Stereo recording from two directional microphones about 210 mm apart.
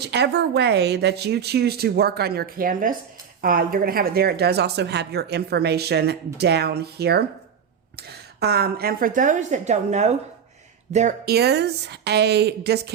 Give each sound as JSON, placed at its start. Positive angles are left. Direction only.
{"t": 0.0, "sound": "a woman's voice", "side_deg": -50}
{"t": 11.3, "sound": "a woman's voice", "side_deg": -50}